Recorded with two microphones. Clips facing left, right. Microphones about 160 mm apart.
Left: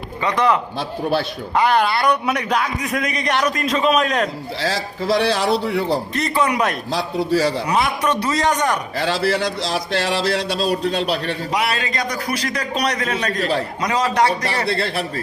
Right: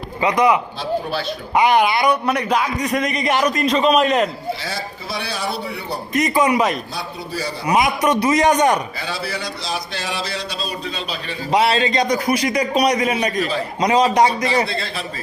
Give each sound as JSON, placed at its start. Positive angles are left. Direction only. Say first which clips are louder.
{"t": 0.2, "sound": "a man's voice", "louder": "right 2 dB", "side_deg": -15}
{"t": 2.2, "sound": "a man's voice", "louder": "right 1 dB", "side_deg": 0}
{"t": 4.6, "sound": "speech", "louder": "left 6 dB", "side_deg": 90}
{"t": 6.1, "sound": "a man's voice", "louder": "right 7 dB", "side_deg": -15}
{"t": 6.9, "sound": "speech", "louder": "left 9 dB", "side_deg": 90}
{"t": 7.7, "sound": "a man's voice", "louder": "right 2 dB", "side_deg": -10}
{"t": 9.0, "sound": "speech", "louder": "left 7 dB", "side_deg": 85}
{"t": 11.5, "sound": "a man's voice", "louder": "right 8 dB", "side_deg": -25}
{"t": 13.4, "sound": "a man's voice", "louder": "left 2 dB", "side_deg": 70}
{"t": 13.8, "sound": "a man's voice", "louder": "right 4 dB", "side_deg": -20}
{"t": 14.7, "sound": "speech", "louder": "left 5 dB", "side_deg": 65}